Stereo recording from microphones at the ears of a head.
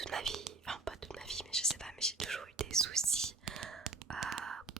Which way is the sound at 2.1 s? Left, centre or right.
Right.